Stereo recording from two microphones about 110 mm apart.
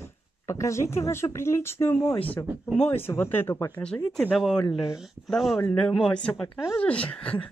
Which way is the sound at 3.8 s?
10° left (ahead or behind).